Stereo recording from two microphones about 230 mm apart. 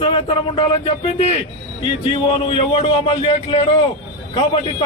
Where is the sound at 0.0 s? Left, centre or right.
Left.